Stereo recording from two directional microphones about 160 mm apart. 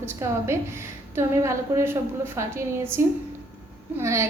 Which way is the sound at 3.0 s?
15° right (ahead or behind).